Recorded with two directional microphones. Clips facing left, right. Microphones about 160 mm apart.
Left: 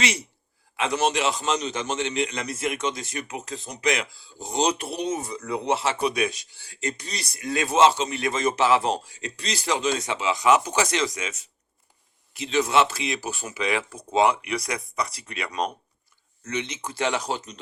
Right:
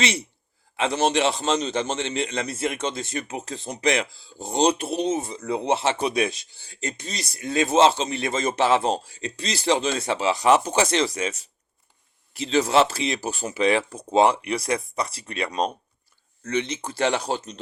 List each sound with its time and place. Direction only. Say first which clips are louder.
0.8 s a man's voice: right 2 dB; 30° right (ahead or behind)